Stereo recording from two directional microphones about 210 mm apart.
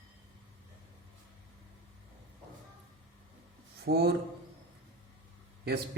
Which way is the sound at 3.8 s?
50° right (ahead or behind).